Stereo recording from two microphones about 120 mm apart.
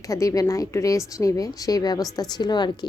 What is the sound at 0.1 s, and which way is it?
A woman's voice, 30° left (ahead or behind).